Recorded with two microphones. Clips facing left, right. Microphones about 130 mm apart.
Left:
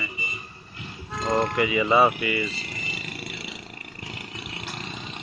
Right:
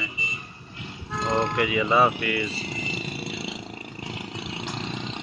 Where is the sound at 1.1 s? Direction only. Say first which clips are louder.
Left 1 dB; centre (ahead or behind).